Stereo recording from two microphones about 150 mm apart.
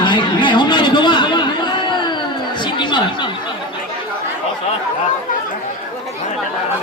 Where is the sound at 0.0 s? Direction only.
30° left (ahead or behind).